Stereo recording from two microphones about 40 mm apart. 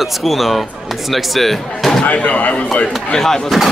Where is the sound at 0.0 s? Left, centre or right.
Centre.